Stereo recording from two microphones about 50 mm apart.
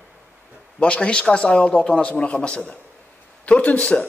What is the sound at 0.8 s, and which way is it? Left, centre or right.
A man's voice, left.